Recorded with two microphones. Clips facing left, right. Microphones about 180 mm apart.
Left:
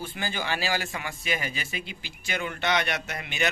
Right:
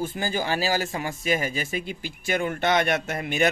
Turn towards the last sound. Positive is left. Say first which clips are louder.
# right 6 dB
turn(degrees=-45)  # may be behind; listen again after turning